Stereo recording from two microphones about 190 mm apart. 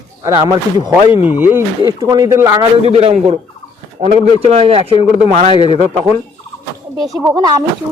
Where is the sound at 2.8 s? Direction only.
30° right (ahead or behind).